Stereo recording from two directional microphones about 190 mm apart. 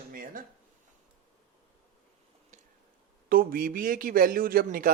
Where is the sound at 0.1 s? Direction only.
45° right (ahead or behind).